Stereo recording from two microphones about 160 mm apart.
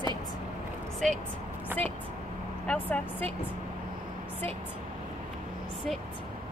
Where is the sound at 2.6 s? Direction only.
10° left (ahead or behind).